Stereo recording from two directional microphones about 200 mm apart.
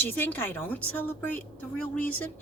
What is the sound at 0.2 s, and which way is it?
A woman's voice, 10° left (ahead or behind).